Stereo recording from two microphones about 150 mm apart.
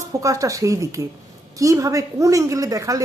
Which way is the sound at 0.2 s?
20° right (ahead or behind).